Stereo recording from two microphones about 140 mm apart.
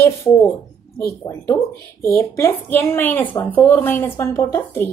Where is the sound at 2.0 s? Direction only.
15° left (ahead or behind).